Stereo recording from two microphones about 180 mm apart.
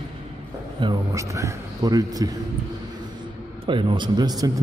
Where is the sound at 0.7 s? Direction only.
20° right (ahead or behind).